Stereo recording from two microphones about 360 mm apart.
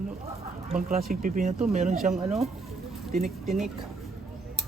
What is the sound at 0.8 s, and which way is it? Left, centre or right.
Speech, right.